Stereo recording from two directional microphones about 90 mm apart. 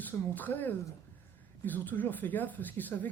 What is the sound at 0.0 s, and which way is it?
Speech, 20° left (ahead or behind).